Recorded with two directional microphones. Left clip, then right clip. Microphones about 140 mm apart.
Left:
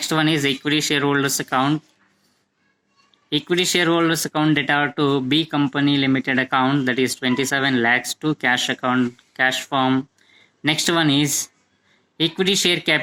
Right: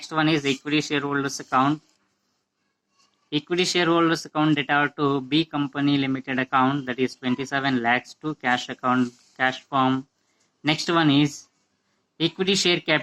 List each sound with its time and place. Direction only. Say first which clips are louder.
0.0 s speech: left 3 dB; 45° left (ahead or behind)
3.2 s speech: left 4 dB; 45° left (ahead or behind)